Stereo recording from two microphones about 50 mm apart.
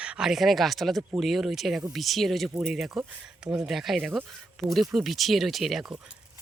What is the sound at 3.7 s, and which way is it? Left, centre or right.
Speech, centre.